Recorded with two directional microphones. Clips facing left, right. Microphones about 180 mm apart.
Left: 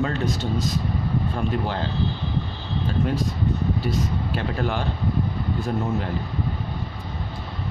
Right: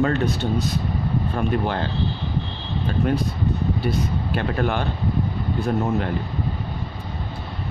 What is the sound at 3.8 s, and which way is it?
Speech, 60° right (ahead or behind).